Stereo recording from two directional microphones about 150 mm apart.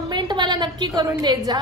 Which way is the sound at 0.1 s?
30° right (ahead or behind).